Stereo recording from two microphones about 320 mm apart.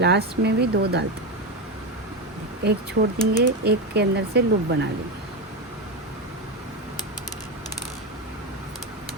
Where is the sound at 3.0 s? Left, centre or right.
Right.